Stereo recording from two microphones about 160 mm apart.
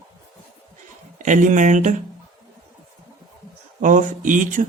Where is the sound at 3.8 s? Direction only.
55° right (ahead or behind).